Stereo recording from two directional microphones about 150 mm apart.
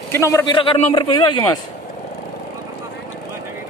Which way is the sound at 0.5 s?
35° left (ahead or behind).